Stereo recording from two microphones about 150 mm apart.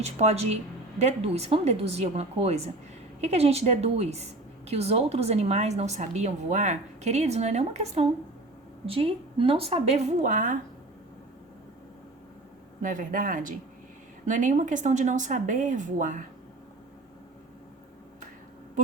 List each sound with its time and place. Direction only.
0.0 s a woman's voice: 45° right (ahead or behind)
12.8 s speech: 65° right (ahead or behind)